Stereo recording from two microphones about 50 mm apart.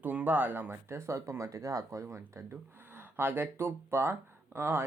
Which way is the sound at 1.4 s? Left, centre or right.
Right.